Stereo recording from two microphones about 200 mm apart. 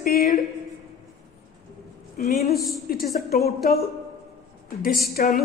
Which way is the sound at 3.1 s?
45° left (ahead or behind).